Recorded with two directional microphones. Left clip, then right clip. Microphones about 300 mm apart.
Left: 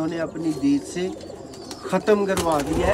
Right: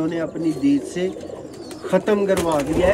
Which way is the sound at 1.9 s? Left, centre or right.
Centre.